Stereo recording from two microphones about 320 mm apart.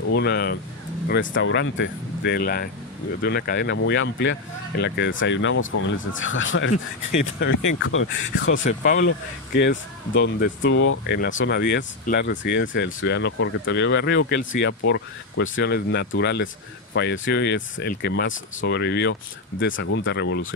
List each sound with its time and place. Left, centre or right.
0.0 s speech: left
7.8 s speech: left
8.6 s speech: left
9.0 s speech: left